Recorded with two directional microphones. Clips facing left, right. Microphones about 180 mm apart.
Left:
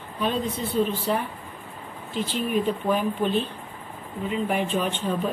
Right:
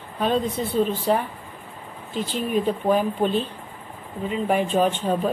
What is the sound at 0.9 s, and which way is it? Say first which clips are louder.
A woman's voice: right 4 dB; 50° right (ahead or behind).